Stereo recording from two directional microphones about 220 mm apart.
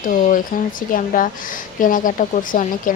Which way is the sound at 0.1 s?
40° left (ahead or behind).